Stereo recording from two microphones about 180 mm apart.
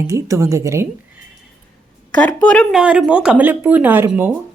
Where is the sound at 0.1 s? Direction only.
15° right (ahead or behind).